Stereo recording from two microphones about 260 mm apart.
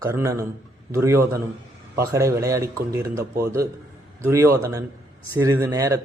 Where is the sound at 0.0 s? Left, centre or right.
Centre.